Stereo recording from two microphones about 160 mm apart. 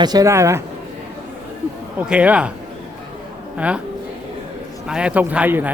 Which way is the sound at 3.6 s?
10° right (ahead or behind).